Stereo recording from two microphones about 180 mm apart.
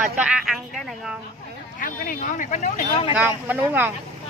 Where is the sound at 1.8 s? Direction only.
45° left (ahead or behind).